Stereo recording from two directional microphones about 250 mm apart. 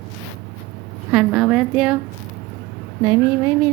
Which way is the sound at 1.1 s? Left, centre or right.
Centre.